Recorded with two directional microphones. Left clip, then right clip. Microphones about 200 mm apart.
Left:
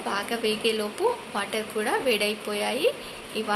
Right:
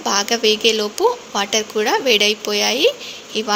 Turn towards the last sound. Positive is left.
turn(degrees=-35)  # may be behind; listen again after turning